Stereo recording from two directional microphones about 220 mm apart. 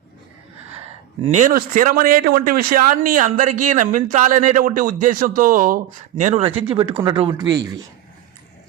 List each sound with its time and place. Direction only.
1.2 s speech: 30° right (ahead or behind); by 7.7 s 15° right (ahead or behind)